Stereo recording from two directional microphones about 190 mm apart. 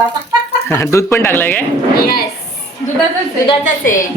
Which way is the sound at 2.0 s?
50° left (ahead or behind).